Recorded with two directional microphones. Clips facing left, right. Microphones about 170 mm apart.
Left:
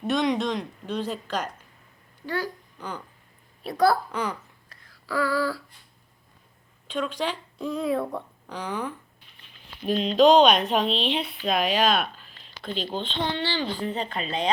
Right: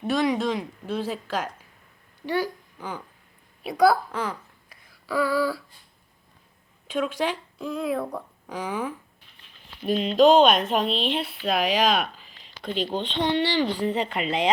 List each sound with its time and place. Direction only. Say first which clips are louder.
0.1 s speech: right 1 dB; 5° right (ahead or behind)
4.8 s a sound: right 2 dB; 15° right (ahead or behind)
6.8 s speech: right 2 dB; 10° right (ahead or behind)
13.3 s speech: right 5 dB; 75° right (ahead or behind)
13.8 s speech: right 4 dB; 20° right (ahead or behind)